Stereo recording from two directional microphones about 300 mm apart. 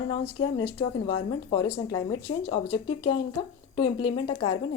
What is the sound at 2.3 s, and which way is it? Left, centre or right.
Speech, left.